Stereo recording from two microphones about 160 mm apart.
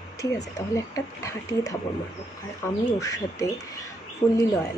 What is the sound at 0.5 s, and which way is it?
Speech, 20° left (ahead or behind).